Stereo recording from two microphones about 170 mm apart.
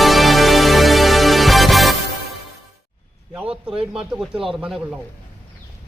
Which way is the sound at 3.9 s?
5° right (ahead or behind).